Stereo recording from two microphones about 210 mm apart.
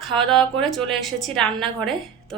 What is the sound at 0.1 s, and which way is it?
A woman's voice, centre (ahead or behind).